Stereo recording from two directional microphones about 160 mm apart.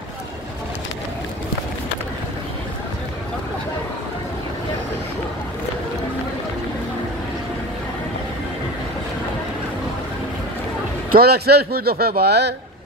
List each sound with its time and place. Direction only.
11.1 s speech: 75° right (ahead or behind); by 12.5 s 90° right